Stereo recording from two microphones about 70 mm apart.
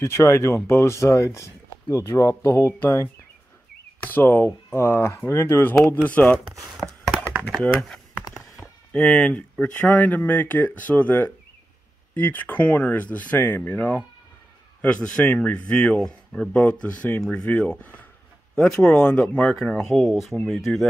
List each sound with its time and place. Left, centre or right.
0.0 s speech: left
2.5 s speech: left
8.9 s speech: centre
18.5 s speech: centre